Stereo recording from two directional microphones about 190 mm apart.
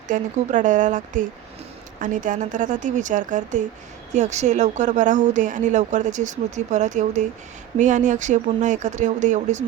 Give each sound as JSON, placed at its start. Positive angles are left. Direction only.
{"t": 0.1, "sound": "a woman's voice", "side_deg": -40}